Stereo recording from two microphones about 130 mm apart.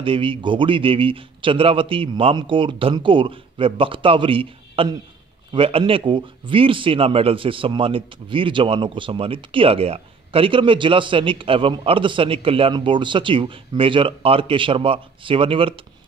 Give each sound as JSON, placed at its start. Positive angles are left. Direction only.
{"t": 0.0, "sound": "speech", "side_deg": -40}